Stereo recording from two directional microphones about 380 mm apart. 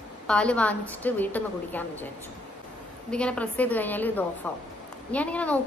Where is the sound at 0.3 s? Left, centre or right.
Centre.